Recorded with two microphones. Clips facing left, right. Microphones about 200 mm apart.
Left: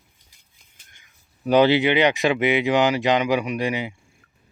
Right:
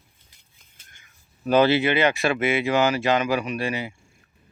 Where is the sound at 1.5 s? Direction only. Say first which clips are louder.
Left 2 dB; 15° left (ahead or behind).